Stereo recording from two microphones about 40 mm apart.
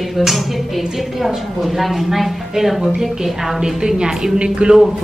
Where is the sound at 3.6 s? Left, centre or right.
Centre.